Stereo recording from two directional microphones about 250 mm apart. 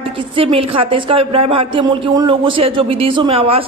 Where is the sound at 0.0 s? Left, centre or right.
Right.